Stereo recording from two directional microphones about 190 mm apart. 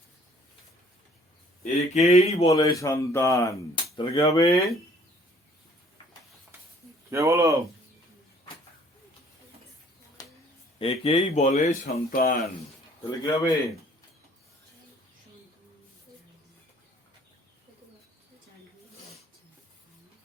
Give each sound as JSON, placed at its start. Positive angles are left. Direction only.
{"t": 1.6, "sound": "speech", "side_deg": 35}
{"t": 2.5, "sound": "speech", "side_deg": 15}
{"t": 7.1, "sound": "speech", "side_deg": -15}
{"t": 10.2, "sound": "a sound", "side_deg": 20}
{"t": 10.8, "sound": "speech", "side_deg": 30}
{"t": 12.1, "sound": "speech", "side_deg": 50}
{"t": 13.1, "sound": "speech", "side_deg": 15}